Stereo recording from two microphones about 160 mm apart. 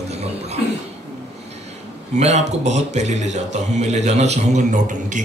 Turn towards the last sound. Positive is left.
turn(degrees=-50)  # may be behind; listen again after turning